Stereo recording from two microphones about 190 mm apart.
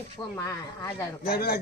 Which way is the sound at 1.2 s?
55° left (ahead or behind).